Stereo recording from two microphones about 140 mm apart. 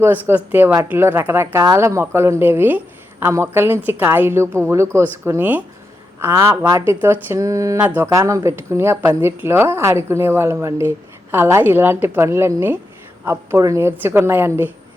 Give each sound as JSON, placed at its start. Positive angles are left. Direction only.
{"t": 0.0, "sound": "speech", "side_deg": -15}